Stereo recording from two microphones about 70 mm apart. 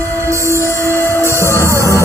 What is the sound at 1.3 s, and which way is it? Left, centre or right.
Music, right.